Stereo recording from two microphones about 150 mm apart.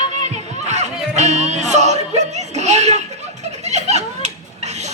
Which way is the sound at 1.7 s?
50° right (ahead or behind).